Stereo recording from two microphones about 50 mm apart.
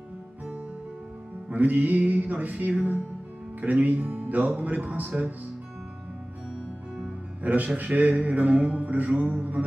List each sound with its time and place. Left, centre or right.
1.5 s speech: right
7.4 s music: right